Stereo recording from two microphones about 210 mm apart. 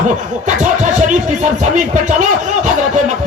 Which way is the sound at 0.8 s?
35° right (ahead or behind).